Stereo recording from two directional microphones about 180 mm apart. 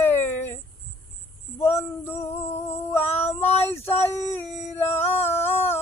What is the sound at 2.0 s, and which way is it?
Music, 10° left (ahead or behind).